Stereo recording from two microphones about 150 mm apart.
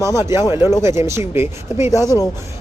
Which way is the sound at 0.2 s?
15° right (ahead or behind).